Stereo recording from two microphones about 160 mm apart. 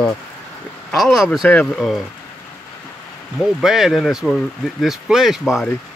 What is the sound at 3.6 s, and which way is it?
Speech, centre (ahead or behind).